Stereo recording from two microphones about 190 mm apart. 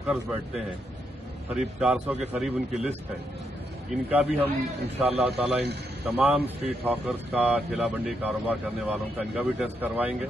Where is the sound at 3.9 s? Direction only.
5° right (ahead or behind).